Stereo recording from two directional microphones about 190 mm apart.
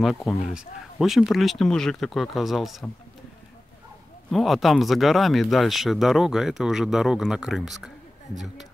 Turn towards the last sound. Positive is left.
turn(degrees=0)  # may be behind; listen again after turning